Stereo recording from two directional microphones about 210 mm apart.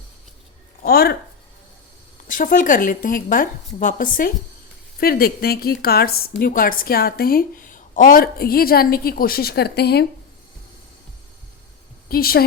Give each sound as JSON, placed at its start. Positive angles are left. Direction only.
{"t": 0.8, "sound": "speech", "side_deg": 45}
{"t": 2.2, "sound": "a woman's voice", "side_deg": 40}
{"t": 12.0, "sound": "a woman's voice", "side_deg": 45}